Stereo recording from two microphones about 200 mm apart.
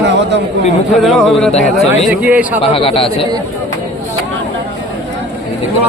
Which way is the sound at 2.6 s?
30° left (ahead or behind).